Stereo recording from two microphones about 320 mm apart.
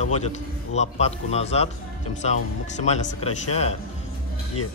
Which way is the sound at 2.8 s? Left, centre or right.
Left.